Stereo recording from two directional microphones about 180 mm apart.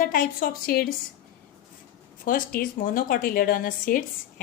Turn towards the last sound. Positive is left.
turn(degrees=50)  # may be behind; listen again after turning